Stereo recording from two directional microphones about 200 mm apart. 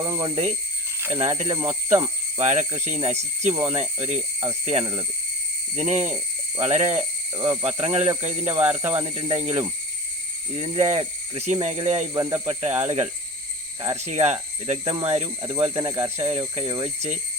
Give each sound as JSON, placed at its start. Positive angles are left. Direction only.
{"t": 0.0, "sound": "speech", "side_deg": -20}
{"t": 1.1, "sound": "speech", "side_deg": -30}
{"t": 7.3, "sound": "speech", "side_deg": -20}
{"t": 7.6, "sound": "speech", "side_deg": -30}
{"t": 10.5, "sound": "speech", "side_deg": -30}